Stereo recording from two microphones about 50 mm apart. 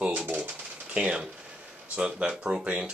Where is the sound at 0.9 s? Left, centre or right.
Right.